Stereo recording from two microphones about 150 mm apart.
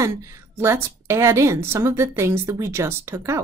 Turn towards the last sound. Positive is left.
turn(degrees=-20)  # may be behind; listen again after turning